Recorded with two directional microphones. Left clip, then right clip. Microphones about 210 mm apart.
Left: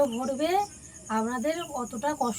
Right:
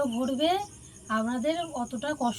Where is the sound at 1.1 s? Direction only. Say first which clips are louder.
Even; 15° left (ahead or behind).